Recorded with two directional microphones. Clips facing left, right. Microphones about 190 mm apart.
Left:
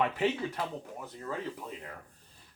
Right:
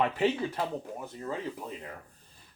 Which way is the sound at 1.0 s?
25° right (ahead or behind).